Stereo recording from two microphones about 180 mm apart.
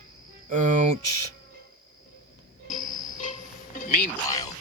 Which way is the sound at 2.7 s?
45° left (ahead or behind).